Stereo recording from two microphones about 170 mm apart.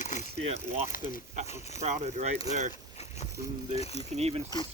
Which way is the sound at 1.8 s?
40° right (ahead or behind).